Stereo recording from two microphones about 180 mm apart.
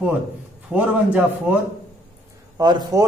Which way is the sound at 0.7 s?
5° right (ahead or behind).